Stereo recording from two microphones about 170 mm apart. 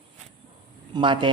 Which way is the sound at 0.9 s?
30° right (ahead or behind).